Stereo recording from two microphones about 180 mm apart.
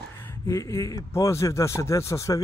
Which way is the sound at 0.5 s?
20° left (ahead or behind).